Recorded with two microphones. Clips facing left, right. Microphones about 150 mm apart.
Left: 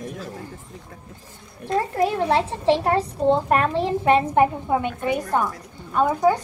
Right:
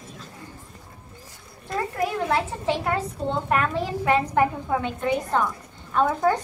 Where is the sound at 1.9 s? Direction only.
30° left (ahead or behind); by 6.4 s 10° left (ahead or behind).